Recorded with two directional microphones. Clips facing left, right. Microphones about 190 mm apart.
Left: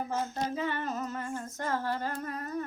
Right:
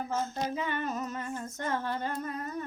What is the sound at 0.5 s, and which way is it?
Female singing, 15° right (ahead or behind).